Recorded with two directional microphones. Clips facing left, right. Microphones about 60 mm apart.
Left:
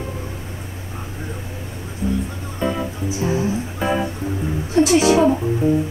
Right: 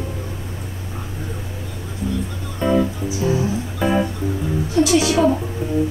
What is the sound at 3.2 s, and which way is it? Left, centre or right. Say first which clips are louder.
Music: right 1 dB; left.